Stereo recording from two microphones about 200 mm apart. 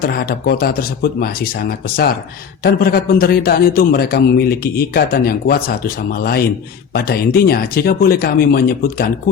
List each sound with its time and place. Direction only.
0.0 s a man's voice: 50° left (ahead or behind)